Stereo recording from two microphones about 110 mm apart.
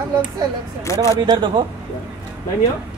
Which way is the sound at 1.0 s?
40° right (ahead or behind).